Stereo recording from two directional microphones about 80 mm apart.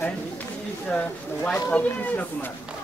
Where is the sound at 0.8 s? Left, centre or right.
Centre.